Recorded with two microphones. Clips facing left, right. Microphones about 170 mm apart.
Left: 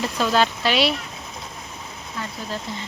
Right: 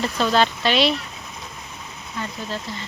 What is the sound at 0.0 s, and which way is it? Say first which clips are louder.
Speech: right 1 dB; 5° left (ahead or behind).